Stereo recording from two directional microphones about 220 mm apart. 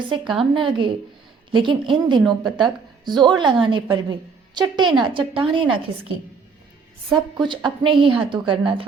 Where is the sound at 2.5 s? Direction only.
20° right (ahead or behind).